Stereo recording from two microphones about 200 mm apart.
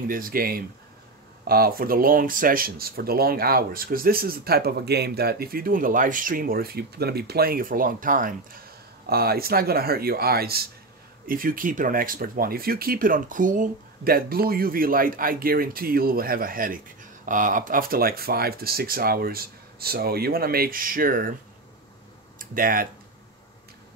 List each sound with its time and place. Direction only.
0.1 s speech: 45° right (ahead or behind)
22.4 s speech: 45° right (ahead or behind)